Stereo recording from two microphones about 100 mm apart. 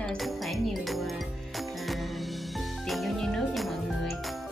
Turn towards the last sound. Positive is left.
turn(degrees=0)  # may be behind; listen again after turning